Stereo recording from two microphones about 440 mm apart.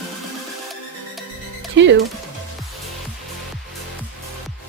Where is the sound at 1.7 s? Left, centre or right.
Right.